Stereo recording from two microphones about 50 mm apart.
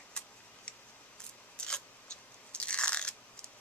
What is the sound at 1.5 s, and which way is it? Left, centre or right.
Scissors, centre.